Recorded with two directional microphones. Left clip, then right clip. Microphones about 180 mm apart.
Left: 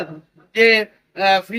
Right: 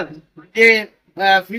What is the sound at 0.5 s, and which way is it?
Speech, 30° left (ahead or behind).